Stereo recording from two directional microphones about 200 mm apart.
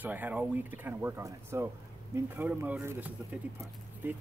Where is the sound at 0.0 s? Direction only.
10° right (ahead or behind).